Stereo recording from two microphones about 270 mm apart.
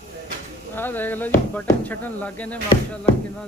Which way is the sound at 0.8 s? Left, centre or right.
Centre.